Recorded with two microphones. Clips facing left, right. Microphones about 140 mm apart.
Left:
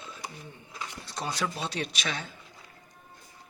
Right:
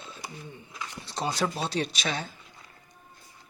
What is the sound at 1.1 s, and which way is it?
Speech, 30° right (ahead or behind).